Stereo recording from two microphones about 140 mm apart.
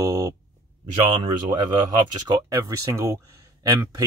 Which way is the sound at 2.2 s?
25° right (ahead or behind).